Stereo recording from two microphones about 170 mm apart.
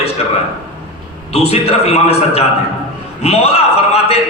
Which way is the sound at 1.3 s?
35° left (ahead or behind).